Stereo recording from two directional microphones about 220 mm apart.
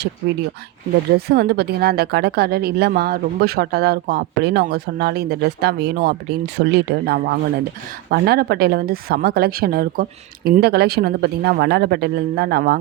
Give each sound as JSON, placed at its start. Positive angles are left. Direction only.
{"t": 1.3, "sound": "speech", "side_deg": -45}